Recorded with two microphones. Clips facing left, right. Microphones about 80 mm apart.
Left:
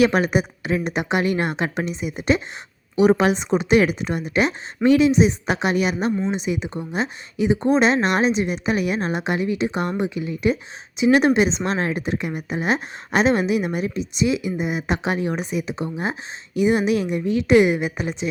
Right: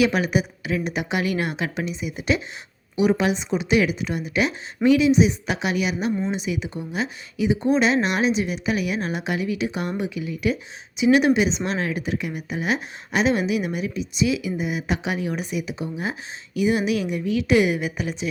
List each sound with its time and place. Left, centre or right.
0.0 s a woman's voice: left
6.3 s speech: left
6.7 s a woman's voice: left